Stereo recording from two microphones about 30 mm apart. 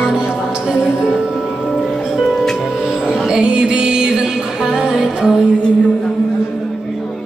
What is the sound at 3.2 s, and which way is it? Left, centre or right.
Music, right.